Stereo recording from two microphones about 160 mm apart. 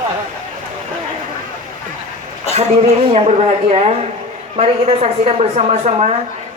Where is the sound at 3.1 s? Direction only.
40° right (ahead or behind).